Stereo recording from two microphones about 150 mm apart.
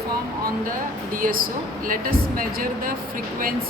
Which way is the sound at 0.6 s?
65° right (ahead or behind).